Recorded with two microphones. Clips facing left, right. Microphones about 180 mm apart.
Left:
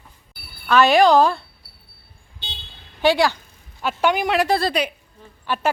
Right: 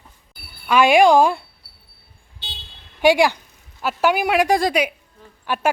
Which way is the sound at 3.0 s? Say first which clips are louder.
Right 2 dB; 15° right (ahead or behind).